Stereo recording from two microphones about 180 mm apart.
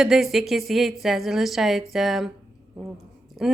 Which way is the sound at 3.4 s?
Centre (ahead or behind).